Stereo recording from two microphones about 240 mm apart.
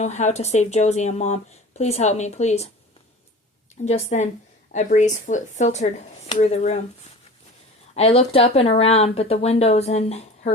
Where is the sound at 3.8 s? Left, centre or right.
Left.